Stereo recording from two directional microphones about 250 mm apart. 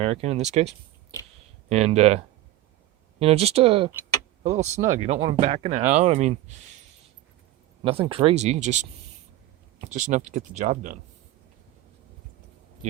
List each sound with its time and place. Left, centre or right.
0.0 s speech: right
1.7 s speech: right
7.9 s speech: right